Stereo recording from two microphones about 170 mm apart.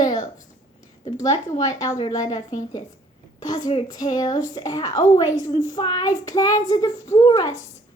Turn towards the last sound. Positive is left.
turn(degrees=25)  # may be behind; listen again after turning